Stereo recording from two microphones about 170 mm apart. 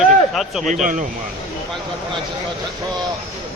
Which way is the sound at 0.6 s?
50° right (ahead or behind).